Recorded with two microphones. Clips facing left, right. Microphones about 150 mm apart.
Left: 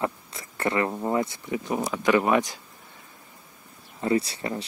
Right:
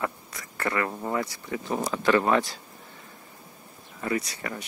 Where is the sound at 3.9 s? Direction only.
25° left (ahead or behind).